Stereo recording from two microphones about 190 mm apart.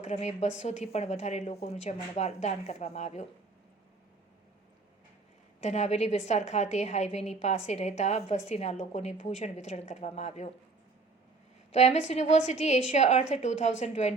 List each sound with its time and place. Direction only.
0.0 s a woman's voice: 35° left (ahead or behind)
5.5 s a woman's voice: 35° left (ahead or behind)
11.7 s a woman's voice: 35° left (ahead or behind)